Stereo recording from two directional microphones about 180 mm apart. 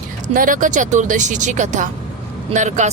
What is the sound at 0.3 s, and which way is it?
Speech, 50° right (ahead or behind).